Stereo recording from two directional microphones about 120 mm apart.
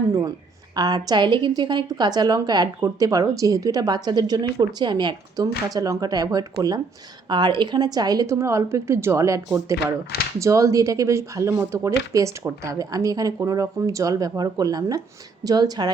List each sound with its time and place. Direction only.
0.1 s a woman's voice: 30° right (ahead or behind)